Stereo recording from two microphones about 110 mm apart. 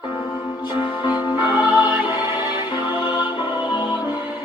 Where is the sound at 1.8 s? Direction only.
40° left (ahead or behind).